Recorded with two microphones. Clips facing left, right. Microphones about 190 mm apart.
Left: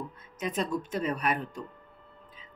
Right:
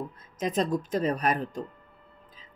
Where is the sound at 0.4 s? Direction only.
35° right (ahead or behind).